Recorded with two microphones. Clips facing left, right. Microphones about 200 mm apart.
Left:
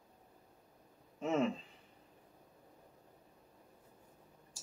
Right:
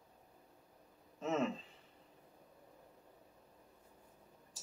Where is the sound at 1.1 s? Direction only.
15° left (ahead or behind).